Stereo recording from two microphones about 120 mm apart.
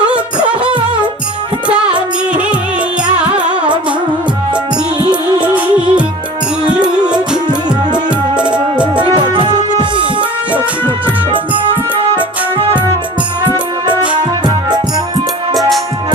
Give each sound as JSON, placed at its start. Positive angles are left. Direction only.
{"t": 0.1, "sound": "music of bollywood", "side_deg": -10}
{"t": 1.6, "sound": "music", "side_deg": -10}
{"t": 5.4, "sound": "music", "side_deg": -10}
{"t": 9.1, "sound": "music", "side_deg": -40}
{"t": 11.3, "sound": "music", "side_deg": -45}